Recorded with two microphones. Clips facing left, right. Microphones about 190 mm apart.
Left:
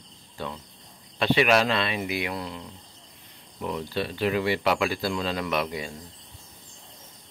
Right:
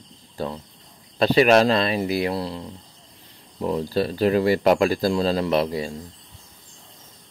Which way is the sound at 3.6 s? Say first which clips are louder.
Right 7 dB; 35° right (ahead or behind).